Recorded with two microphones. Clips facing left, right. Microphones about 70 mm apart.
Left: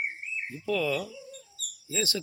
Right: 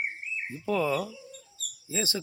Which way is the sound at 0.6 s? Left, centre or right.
Right.